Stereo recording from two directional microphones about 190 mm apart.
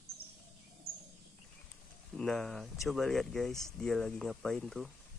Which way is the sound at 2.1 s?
Centre (ahead or behind).